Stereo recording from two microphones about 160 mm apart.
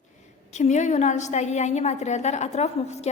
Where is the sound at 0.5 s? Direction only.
45° left (ahead or behind).